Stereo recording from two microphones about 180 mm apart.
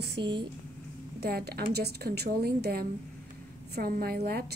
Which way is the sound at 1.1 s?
65° right (ahead or behind).